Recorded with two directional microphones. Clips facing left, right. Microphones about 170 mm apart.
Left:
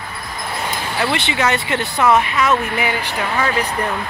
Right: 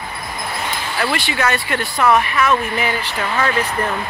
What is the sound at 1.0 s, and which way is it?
Speech, 20° left (ahead or behind).